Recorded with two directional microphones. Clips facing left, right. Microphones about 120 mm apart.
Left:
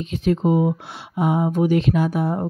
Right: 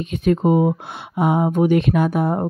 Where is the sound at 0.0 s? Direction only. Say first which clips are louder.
Right 2 dB; 55° right (ahead or behind).